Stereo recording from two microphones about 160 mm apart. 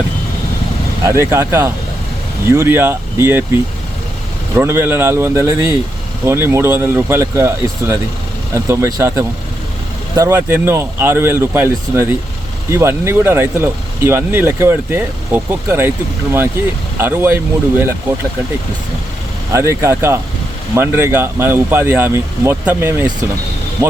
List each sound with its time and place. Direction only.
1.0 s speech: 15° right (ahead or behind)
17.0 s speech: 15° right (ahead or behind)
19.5 s speech: 15° right (ahead or behind)